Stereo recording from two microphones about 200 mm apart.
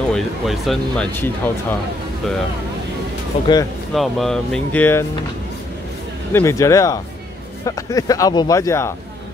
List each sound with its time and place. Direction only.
0.1 s speech: centre (ahead or behind)
3.9 s speech: centre (ahead or behind)
6.3 s speech: 15° left (ahead or behind)